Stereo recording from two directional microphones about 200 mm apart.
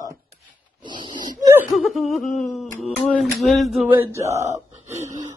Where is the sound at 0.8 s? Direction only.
25° right (ahead or behind).